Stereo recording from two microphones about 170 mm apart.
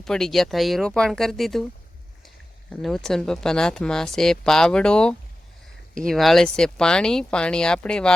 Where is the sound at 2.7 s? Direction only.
Centre (ahead or behind).